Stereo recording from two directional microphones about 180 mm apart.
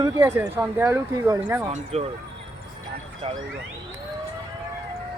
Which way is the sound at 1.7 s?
35° right (ahead or behind).